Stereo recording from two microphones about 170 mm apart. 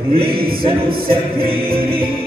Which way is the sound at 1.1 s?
60° right (ahead or behind).